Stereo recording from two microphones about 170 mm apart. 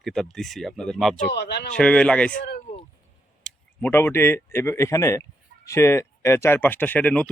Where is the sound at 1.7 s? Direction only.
5° left (ahead or behind).